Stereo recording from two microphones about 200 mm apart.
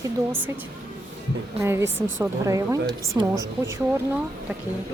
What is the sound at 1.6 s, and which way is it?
A woman's voice, 10° right (ahead or behind).